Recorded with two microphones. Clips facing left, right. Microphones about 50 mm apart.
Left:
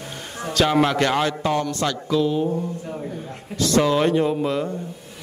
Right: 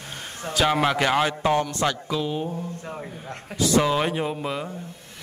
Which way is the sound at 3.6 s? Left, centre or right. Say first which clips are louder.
Left 3 dB; centre.